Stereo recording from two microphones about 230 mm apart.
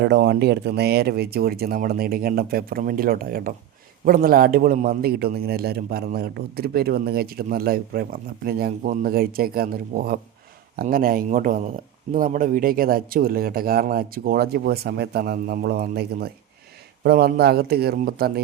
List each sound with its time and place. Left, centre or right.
0.0 s a man's voice: right